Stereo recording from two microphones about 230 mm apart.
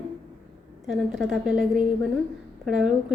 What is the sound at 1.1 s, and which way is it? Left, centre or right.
A woman's voice, centre.